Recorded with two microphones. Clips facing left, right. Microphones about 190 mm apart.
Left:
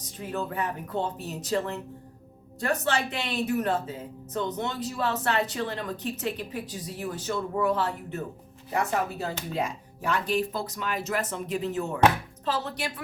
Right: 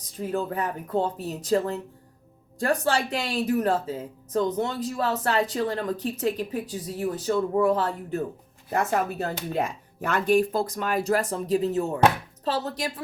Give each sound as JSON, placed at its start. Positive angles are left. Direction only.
{"t": 0.2, "sound": "speech", "side_deg": -35}
{"t": 8.7, "sound": "speech", "side_deg": -50}